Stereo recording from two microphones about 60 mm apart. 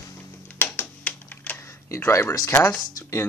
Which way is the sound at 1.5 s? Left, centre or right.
Left.